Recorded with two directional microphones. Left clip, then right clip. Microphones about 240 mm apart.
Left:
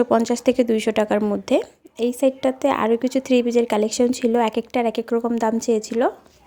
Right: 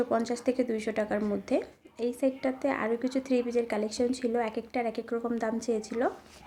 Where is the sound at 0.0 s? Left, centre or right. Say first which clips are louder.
Left 10 dB; left.